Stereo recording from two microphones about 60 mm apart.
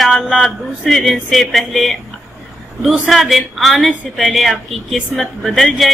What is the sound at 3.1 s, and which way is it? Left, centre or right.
Speech, centre.